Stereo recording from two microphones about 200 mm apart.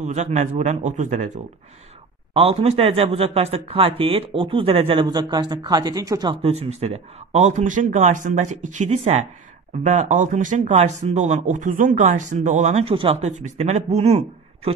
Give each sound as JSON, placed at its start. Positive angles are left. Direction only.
{"t": 0.0, "sound": "speech", "side_deg": -35}
{"t": 6.4, "sound": "speech", "side_deg": -30}